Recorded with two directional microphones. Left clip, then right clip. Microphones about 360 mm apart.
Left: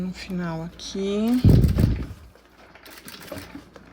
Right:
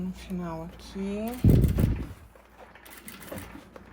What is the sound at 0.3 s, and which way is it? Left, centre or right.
Speech, centre.